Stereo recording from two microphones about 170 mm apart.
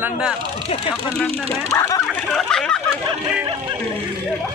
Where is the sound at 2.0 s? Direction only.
5° left (ahead or behind).